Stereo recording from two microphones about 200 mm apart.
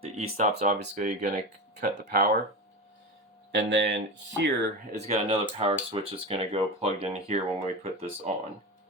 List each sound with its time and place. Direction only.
0.0 s speech: 30° right (ahead or behind)
3.5 s speech: 65° right (ahead or behind)
4.9 s speech: 35° right (ahead or behind)